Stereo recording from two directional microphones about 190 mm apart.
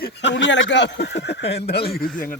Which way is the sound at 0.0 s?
65° left (ahead or behind).